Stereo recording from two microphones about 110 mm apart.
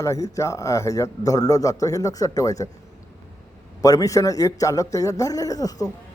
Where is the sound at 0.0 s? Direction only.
30° left (ahead or behind).